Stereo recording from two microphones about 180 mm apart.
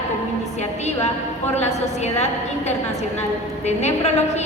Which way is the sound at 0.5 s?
40° left (ahead or behind).